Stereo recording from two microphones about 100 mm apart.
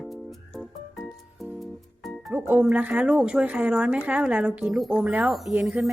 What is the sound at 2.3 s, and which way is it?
Speech, 15° right (ahead or behind).